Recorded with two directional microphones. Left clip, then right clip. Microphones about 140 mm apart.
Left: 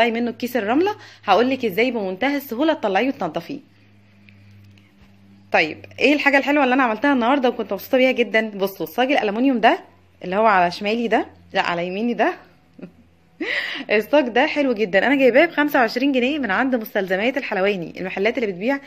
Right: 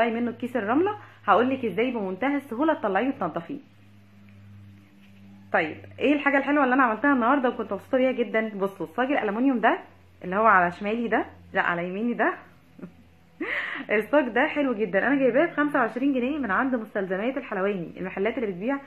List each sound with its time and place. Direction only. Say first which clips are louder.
0.0 s a woman's voice: left 6 dB; 25° left (ahead or behind)
5.9 s a woman's voice: left 6 dB; 20° left (ahead or behind)
12.8 s a sound: left 4 dB; 15° left (ahead or behind)
13.4 s a woman's voice: left 5 dB; 25° left (ahead or behind)
14.9 s a woman's voice: left 8 dB; 35° left (ahead or behind)